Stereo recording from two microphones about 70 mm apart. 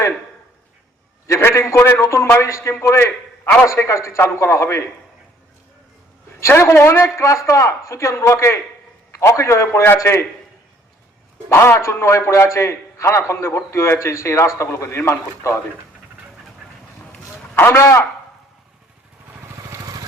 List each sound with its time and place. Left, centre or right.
1.5 s speech: left
3.0 s a man's voice: left
3.7 s speech: left
6.5 s a man's voice: left
7.0 s a man's voice: left
11.4 s a man's voice: left
17.5 s a man's voice: left
19.7 s vehicle: right